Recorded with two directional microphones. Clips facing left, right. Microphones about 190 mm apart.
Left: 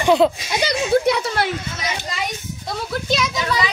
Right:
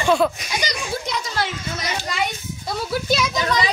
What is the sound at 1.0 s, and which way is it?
Speech, 60° left (ahead or behind).